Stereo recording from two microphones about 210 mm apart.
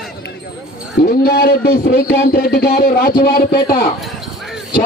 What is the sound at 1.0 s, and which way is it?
A man's voice, 50° left (ahead or behind).